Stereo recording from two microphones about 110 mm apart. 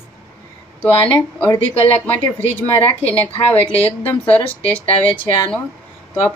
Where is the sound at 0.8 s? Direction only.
10° left (ahead or behind).